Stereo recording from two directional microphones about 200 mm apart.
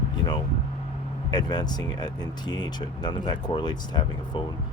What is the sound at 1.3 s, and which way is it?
Speech, 20° left (ahead or behind).